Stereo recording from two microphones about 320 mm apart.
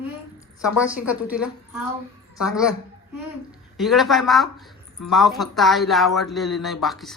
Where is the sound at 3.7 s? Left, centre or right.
Centre.